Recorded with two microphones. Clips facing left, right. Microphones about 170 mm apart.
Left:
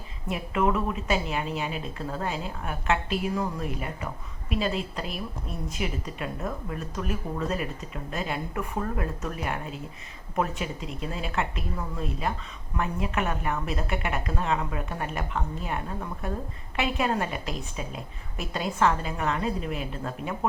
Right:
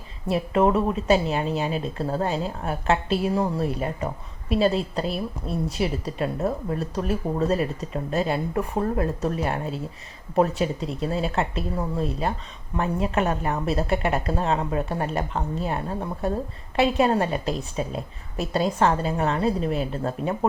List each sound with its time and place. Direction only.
0.3 s speech: 35° right (ahead or behind)